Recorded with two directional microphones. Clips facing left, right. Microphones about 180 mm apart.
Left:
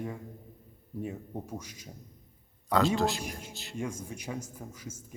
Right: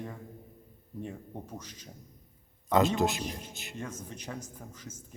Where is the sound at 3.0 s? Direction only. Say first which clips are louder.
Even; 20° right (ahead or behind).